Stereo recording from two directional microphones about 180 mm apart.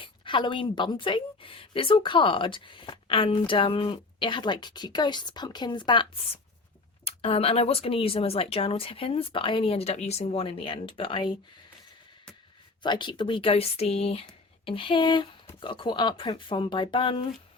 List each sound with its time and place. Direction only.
0.0 s a woman's voice: 25° left (ahead or behind)
12.8 s a woman's voice: 25° left (ahead or behind)